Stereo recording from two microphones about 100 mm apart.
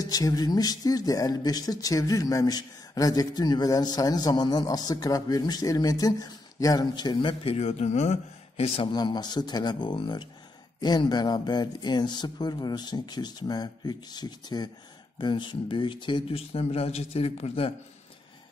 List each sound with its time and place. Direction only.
0.0 s speech: 40° left (ahead or behind); by 7.9 s 85° left
8.8 s speech: 45° left (ahead or behind)
16.3 s speech: 80° left